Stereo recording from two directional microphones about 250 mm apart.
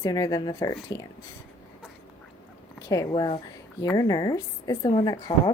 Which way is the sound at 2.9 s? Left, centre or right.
Centre.